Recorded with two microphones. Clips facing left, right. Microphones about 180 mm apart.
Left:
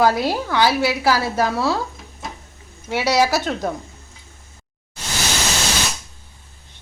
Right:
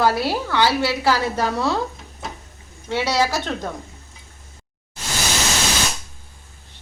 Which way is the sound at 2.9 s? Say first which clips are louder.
Left 3 dB; 10° left (ahead or behind).